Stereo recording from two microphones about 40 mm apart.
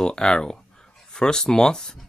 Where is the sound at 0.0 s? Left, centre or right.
Centre.